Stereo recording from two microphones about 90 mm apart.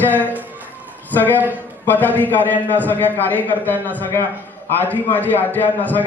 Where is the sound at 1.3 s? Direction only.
20° right (ahead or behind).